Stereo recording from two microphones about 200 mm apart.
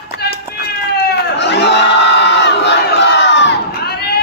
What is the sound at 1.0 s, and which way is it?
Crowd, 55° left (ahead or behind).